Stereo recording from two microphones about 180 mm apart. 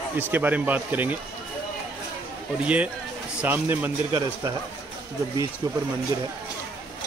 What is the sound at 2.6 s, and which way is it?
Speech, 10° right (ahead or behind).